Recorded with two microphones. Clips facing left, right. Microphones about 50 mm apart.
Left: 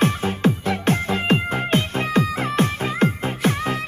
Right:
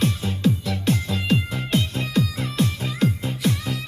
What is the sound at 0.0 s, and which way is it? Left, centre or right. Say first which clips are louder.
Music: left 3 dB; left.